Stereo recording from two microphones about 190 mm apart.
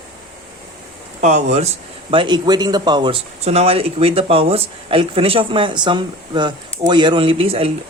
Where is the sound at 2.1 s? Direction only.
25° right (ahead or behind).